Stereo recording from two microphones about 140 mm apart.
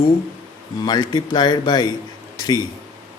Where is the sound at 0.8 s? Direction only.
30° left (ahead or behind).